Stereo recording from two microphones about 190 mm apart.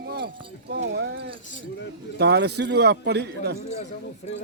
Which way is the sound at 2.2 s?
60° right (ahead or behind).